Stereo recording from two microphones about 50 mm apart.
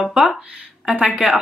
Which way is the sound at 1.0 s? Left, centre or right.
Centre.